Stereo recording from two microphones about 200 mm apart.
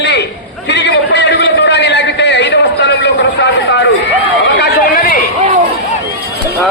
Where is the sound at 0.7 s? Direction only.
60° left (ahead or behind).